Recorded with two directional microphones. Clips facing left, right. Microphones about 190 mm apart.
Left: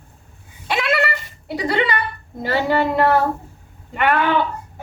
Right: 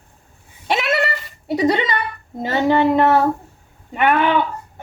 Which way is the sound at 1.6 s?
20° right (ahead or behind).